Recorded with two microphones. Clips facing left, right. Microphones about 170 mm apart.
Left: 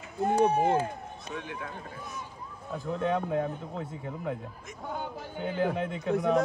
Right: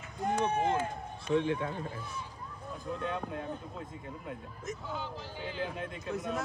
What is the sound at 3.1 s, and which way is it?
Speech, 65° left (ahead or behind).